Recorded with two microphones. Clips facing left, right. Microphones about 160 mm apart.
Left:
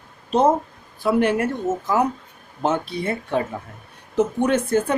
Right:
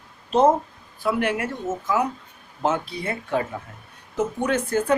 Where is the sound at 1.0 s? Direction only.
30° left (ahead or behind).